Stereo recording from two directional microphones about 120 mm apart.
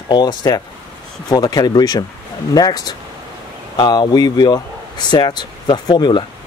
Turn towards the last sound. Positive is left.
turn(degrees=40)  # may be behind; listen again after turning